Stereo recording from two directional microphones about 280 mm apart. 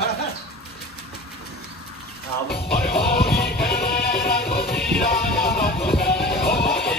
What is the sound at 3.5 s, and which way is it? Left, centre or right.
Music, left.